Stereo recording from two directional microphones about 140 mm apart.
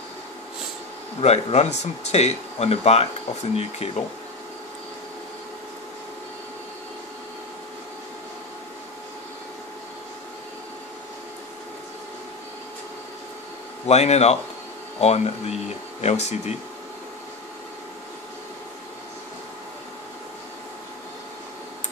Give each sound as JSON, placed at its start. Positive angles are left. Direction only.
{"t": 1.2, "sound": "speech", "side_deg": 50}
{"t": 13.8, "sound": "speech", "side_deg": 50}